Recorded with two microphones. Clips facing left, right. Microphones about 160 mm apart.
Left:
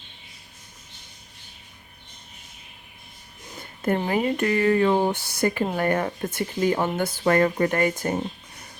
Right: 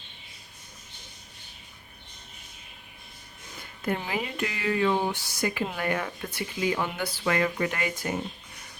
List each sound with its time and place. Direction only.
3.8 s speech: 45° left (ahead or behind)